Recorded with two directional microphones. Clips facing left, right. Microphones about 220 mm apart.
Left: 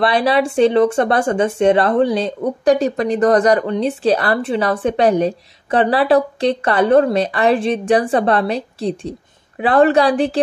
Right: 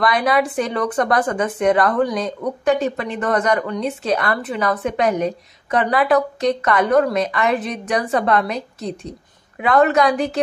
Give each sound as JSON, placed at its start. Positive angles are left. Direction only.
{"t": 0.0, "sound": "a woman's voice", "side_deg": 30}